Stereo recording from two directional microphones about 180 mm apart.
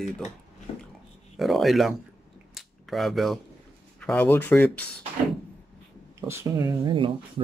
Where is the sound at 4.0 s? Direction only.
5° left (ahead or behind).